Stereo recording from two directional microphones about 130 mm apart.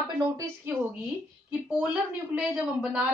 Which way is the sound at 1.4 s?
10° right (ahead or behind).